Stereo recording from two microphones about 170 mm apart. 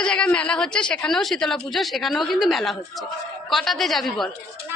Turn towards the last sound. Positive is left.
turn(degrees=0)  # may be behind; listen again after turning